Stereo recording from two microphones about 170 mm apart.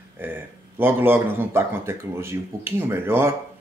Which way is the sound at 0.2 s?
10° right (ahead or behind).